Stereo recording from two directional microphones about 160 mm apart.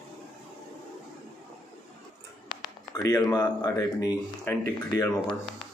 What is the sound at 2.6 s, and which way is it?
Speech, 20° left (ahead or behind).